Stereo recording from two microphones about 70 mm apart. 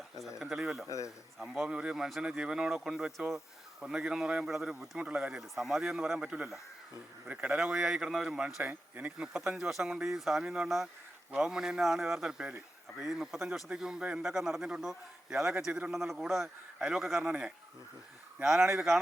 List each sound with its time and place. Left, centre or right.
0.3 s a man's voice: centre
0.9 s a man's voice: left
1.4 s a man's voice: centre
9.6 s a man's voice: centre
18.7 s a man's voice: centre